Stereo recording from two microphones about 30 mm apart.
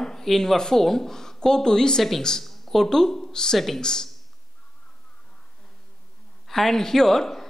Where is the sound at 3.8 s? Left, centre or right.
Left.